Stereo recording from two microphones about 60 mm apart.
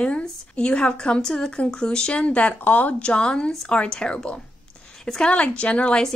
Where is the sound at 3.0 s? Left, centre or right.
Centre.